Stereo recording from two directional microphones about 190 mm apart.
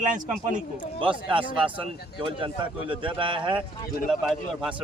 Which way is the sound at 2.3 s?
25° right (ahead or behind).